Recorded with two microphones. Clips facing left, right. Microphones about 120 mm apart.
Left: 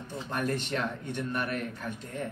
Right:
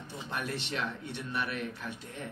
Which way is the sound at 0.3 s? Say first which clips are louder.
Left 5 dB; 45° left (ahead or behind).